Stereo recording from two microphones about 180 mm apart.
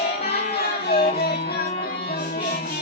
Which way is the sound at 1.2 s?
60° left (ahead or behind).